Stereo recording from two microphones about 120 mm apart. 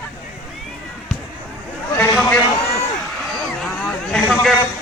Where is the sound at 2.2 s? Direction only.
10° left (ahead or behind).